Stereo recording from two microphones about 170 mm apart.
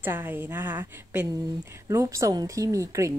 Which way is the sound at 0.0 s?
10° right (ahead or behind).